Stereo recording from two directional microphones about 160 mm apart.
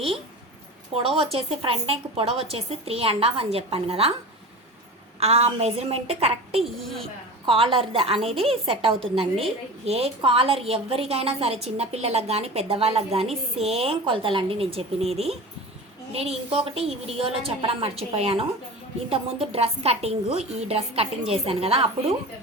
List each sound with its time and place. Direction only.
0.9 s a woman's voice: 35° right (ahead or behind)
5.2 s a woman's voice: 40° right (ahead or behind)